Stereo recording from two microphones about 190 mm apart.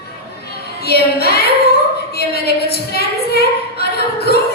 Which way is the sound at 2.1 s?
55° left (ahead or behind).